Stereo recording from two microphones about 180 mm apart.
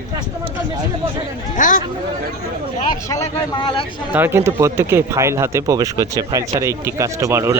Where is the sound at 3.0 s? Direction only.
20° left (ahead or behind).